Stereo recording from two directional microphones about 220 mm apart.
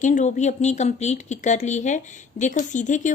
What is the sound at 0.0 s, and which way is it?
Speech, 35° left (ahead or behind).